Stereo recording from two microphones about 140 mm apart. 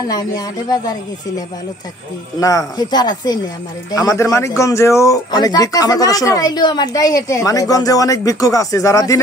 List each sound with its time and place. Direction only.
0.1 s speech: 30° left (ahead or behind)
2.4 s speech: 30° left (ahead or behind)